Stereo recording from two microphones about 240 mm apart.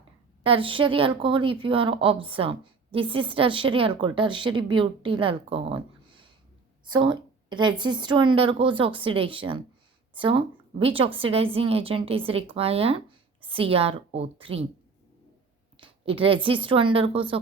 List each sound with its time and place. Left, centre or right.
0.4 s a woman's voice: right
15.8 s a woman's voice: right